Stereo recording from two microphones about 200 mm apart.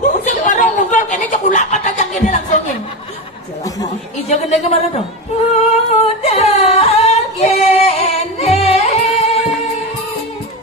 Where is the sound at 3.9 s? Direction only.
35° left (ahead or behind).